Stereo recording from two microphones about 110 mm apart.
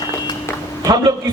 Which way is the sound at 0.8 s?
30° right (ahead or behind).